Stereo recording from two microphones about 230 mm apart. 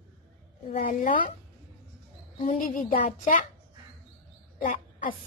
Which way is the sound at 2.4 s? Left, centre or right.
Left.